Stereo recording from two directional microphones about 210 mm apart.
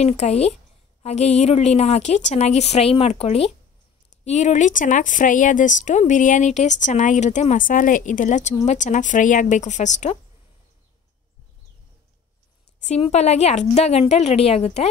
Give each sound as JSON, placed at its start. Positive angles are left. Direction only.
{"t": 0.0, "sound": "speech", "side_deg": 30}
{"t": 12.8, "sound": "speech", "side_deg": 30}